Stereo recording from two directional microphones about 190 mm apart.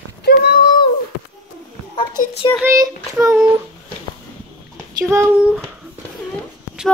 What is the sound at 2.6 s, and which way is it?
Speech, 15° right (ahead or behind).